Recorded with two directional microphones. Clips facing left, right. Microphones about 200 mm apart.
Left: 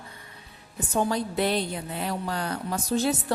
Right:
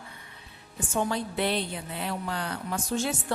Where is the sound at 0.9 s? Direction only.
40° left (ahead or behind).